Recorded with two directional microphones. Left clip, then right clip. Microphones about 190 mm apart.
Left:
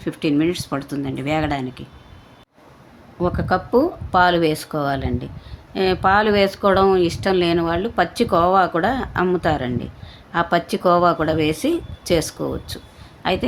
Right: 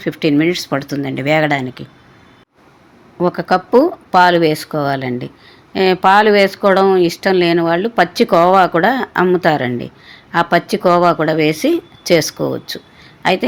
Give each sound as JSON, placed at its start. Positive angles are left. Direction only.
{"t": 0.0, "sound": "speech", "side_deg": -25}
{"t": 3.2, "sound": "speech", "side_deg": -20}